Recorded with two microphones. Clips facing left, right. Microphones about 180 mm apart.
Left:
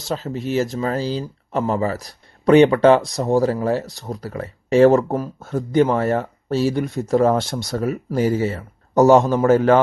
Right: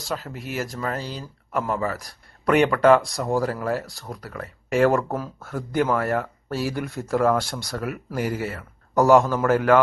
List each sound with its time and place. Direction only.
0.0 s speech: 25° left (ahead or behind)